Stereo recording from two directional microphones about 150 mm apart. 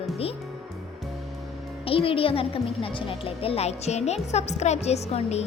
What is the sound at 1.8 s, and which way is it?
A child's voice, 40° left (ahead or behind).